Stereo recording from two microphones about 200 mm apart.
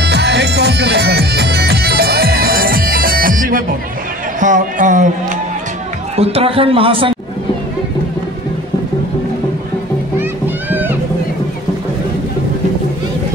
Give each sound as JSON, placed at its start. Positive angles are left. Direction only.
{"t": 0.0, "sound": "music", "side_deg": -60}
{"t": 4.4, "sound": "a man's voice", "side_deg": -40}
{"t": 6.1, "sound": "speech", "side_deg": -30}
{"t": 10.7, "sound": "music", "side_deg": -10}